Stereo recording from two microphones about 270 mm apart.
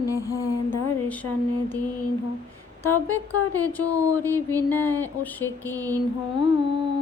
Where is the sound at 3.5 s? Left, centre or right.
Centre.